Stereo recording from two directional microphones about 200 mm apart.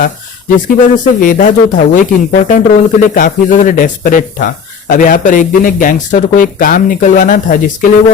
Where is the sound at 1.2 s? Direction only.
40° left (ahead or behind).